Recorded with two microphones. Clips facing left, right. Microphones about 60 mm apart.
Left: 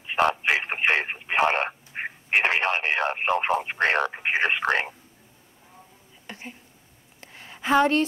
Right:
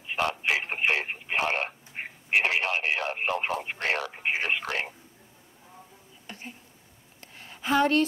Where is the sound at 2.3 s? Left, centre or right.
Left.